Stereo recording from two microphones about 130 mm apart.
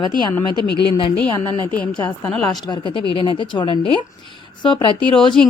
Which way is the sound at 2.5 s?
35° left (ahead or behind).